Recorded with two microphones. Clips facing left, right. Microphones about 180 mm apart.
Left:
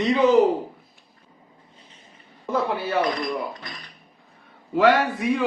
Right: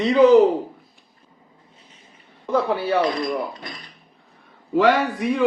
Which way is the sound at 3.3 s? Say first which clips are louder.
Right 3 dB; 20° right (ahead or behind).